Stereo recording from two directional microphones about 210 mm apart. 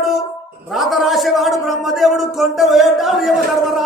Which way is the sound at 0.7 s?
Centre (ahead or behind).